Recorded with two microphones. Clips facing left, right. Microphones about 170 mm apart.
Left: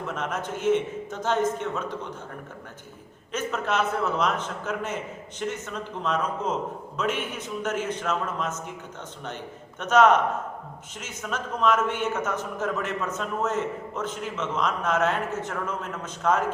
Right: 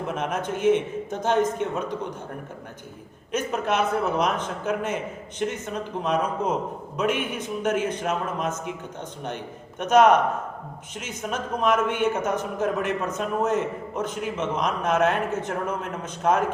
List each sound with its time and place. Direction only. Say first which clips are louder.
0.1 s a man's voice: right 3 dB; 15° right (ahead or behind)
3.3 s a man's voice: right 2 dB; 15° right (ahead or behind)
9.7 s a man's voice: right 2 dB; 15° right (ahead or behind)